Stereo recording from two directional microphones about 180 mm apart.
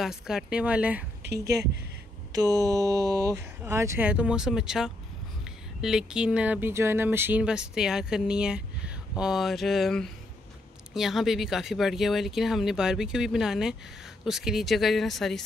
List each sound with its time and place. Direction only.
0.0 s speech: centre (ahead or behind)
2.3 s a sound: 20° right (ahead or behind)
3.6 s speech: 15° right (ahead or behind); by 15.4 s centre (ahead or behind)